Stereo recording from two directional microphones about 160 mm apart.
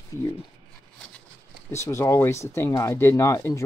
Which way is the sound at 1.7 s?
20° left (ahead or behind).